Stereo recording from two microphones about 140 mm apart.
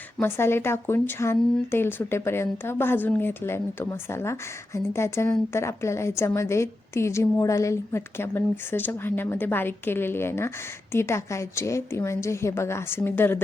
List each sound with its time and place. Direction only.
0.2 s a woman's voice: 15° left (ahead or behind)